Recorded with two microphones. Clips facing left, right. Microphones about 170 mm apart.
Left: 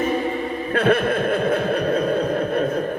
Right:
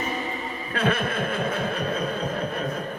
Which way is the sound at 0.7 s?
50° left (ahead or behind).